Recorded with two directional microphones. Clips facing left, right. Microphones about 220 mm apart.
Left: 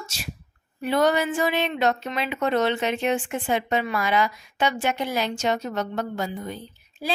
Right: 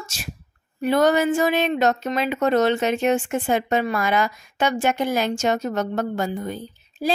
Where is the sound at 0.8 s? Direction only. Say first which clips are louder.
Right 4 dB; 45° right (ahead or behind).